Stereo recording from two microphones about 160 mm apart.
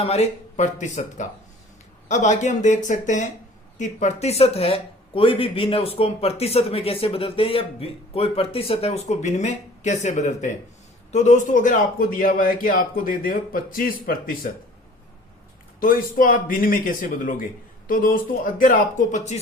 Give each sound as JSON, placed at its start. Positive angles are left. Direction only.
{"t": 0.0, "sound": "a man's voice", "side_deg": 40}
{"t": 15.8, "sound": "a man's voice", "side_deg": 60}